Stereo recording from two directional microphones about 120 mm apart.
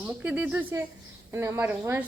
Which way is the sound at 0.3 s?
15° right (ahead or behind).